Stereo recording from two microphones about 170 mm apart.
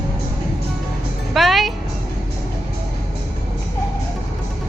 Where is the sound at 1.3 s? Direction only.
Centre (ahead or behind).